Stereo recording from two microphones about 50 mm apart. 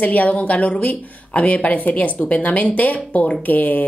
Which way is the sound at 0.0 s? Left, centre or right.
Left.